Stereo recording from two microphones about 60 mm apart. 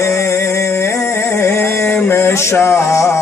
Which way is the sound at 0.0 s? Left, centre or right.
Left.